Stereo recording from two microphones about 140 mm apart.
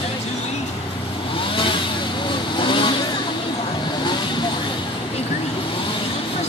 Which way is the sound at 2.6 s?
35° left (ahead or behind).